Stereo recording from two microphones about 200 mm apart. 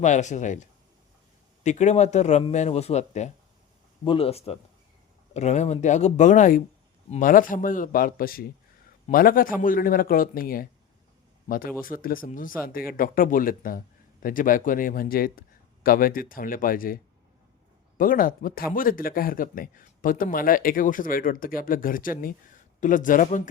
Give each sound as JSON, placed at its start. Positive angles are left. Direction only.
{"t": 0.0, "sound": "a man's voice", "side_deg": 35}